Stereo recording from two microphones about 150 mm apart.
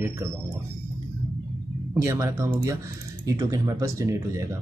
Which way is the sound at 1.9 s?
20° right (ahead or behind).